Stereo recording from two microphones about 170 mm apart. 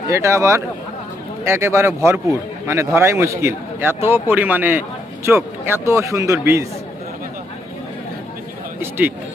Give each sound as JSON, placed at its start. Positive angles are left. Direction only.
{"t": 0.1, "sound": "a man's voice", "side_deg": -15}
{"t": 8.8, "sound": "a man's voice", "side_deg": -10}